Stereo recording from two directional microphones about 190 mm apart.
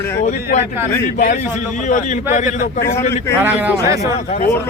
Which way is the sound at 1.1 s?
55° left (ahead or behind).